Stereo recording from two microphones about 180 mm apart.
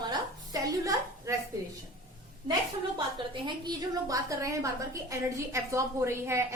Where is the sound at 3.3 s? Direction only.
25° right (ahead or behind).